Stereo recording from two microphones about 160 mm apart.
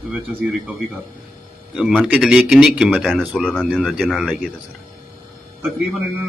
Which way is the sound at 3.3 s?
5° left (ahead or behind).